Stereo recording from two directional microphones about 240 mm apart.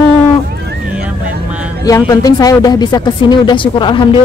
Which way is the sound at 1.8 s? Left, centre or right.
Centre.